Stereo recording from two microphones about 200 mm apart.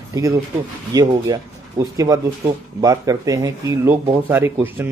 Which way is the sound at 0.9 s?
20° right (ahead or behind).